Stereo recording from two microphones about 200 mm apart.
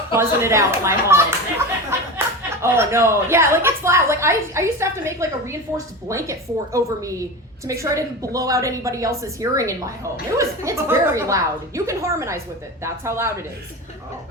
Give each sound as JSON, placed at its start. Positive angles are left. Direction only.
{"t": 0.2, "sound": "a woman's voice", "side_deg": -15}